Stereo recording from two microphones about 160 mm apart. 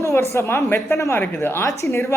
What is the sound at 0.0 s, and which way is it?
A woman's voice, 20° left (ahead or behind).